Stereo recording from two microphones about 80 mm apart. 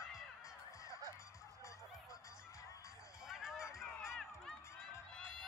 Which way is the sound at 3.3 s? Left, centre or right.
Centre.